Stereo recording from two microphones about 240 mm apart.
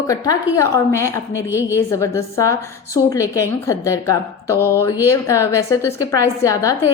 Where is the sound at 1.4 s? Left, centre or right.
Centre.